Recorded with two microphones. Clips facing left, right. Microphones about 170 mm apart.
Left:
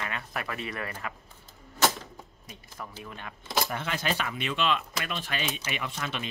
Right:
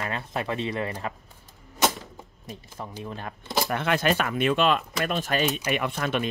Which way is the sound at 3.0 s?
35° right (ahead or behind).